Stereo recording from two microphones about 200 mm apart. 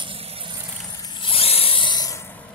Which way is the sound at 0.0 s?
30° right (ahead or behind).